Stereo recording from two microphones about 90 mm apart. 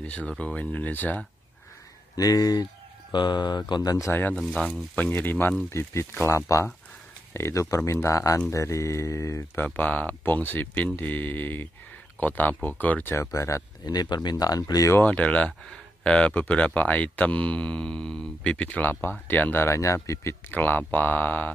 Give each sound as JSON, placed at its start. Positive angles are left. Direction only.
{"t": 0.0, "sound": "speech", "side_deg": 15}
{"t": 2.1, "sound": "speech", "side_deg": 40}
{"t": 4.1, "sound": "speech", "side_deg": 20}
{"t": 4.4, "sound": "speech", "side_deg": 5}
{"t": 4.9, "sound": "speech", "side_deg": 20}
{"t": 9.8, "sound": "speech", "side_deg": 20}
{"t": 13.1, "sound": "speech", "side_deg": 35}
{"t": 13.8, "sound": "speech", "side_deg": 50}
{"t": 15.0, "sound": "speech", "side_deg": 15}
{"t": 20.5, "sound": "speech", "side_deg": 20}